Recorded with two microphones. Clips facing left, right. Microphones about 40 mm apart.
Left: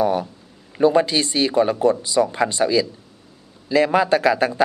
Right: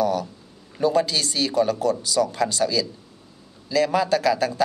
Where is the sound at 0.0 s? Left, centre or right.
Left.